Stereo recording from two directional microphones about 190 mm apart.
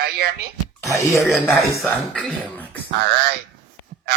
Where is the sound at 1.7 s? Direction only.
10° left (ahead or behind).